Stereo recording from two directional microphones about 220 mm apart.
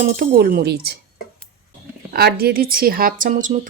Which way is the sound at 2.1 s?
45° right (ahead or behind).